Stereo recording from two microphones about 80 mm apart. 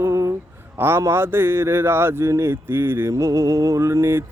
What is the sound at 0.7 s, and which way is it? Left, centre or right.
A man's voice, right.